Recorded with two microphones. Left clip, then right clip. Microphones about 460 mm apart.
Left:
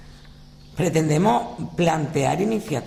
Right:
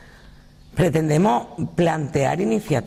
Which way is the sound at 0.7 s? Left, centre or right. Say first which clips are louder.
Right 2 dB; right.